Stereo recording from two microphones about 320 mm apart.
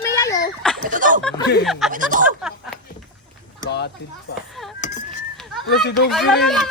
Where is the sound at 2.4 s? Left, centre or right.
Centre.